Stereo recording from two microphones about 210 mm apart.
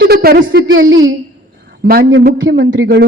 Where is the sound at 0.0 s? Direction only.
45° right (ahead or behind).